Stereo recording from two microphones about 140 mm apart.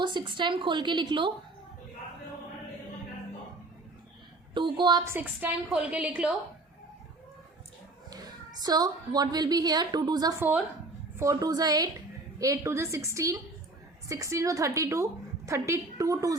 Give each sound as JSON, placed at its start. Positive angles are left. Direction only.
{"t": 0.0, "sound": "a woman's voice", "side_deg": -35}
{"t": 4.5, "sound": "a woman's voice", "side_deg": -35}
{"t": 5.0, "sound": "a woman's voice", "side_deg": -15}
{"t": 8.1, "sound": "a woman's voice", "side_deg": -30}